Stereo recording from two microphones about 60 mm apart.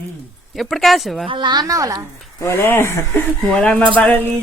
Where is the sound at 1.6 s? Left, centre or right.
Right.